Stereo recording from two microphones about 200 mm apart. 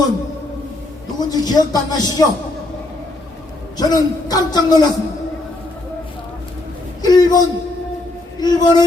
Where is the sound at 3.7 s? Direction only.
20° left (ahead or behind).